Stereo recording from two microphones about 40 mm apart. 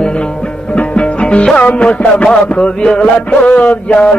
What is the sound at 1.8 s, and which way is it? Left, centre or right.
Mantra, left.